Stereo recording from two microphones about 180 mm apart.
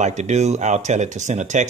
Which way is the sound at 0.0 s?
40° right (ahead or behind).